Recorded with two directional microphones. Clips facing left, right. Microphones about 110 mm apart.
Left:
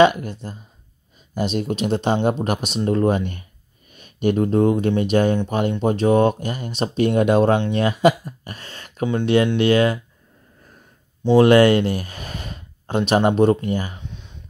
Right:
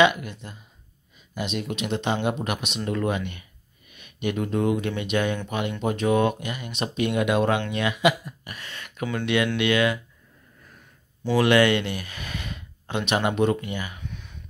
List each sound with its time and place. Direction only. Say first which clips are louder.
0.0 s speech: left 5 dB; 35° left (ahead or behind)
11.4 s speech: left 4 dB; 40° left (ahead or behind)
13.9 s a sound: left 1 dB; 25° left (ahead or behind)